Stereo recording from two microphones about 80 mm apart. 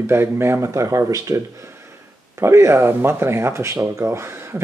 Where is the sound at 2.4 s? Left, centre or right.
Right.